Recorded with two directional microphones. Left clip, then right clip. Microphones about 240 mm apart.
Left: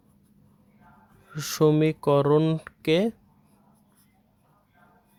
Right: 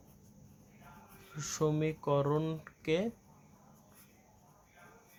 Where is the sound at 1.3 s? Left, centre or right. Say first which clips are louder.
Left 12 dB; left.